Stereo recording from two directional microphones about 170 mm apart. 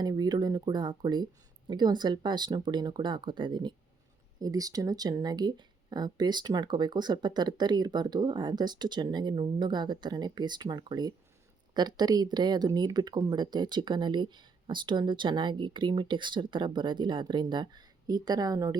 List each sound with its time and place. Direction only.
0.0 s speech: 25° right (ahead or behind)